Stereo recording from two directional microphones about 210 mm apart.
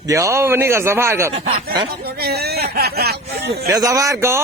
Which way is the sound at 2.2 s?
50° right (ahead or behind).